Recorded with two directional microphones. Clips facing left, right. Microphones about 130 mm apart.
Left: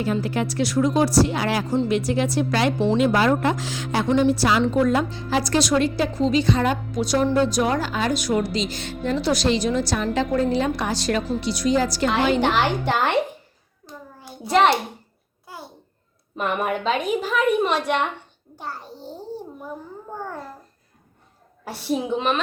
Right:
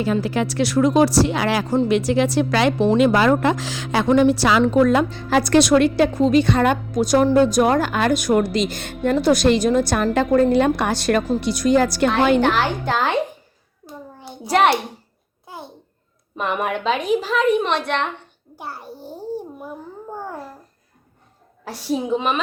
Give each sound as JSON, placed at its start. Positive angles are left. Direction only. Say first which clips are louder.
{"t": 0.0, "sound": "a woman's voice", "louder": "right 3 dB", "side_deg": -90}
{"t": 12.4, "sound": "speech", "louder": "right 2 dB", "side_deg": 5}
{"t": 13.8, "sound": "a sound", "louder": "right 3 dB", "side_deg": -20}
{"t": 14.5, "sound": "a child's voice", "louder": "right 1 dB", "side_deg": -10}
{"t": 15.4, "sound": "babbling", "louder": "right 3 dB", "side_deg": -20}
{"t": 16.4, "sound": "a woman's voice", "louder": "right 1 dB", "side_deg": 0}
{"t": 18.5, "sound": "a sound", "louder": "right 1 dB", "side_deg": -10}
{"t": 21.6, "sound": "speech", "louder": "right 1 dB", "side_deg": 5}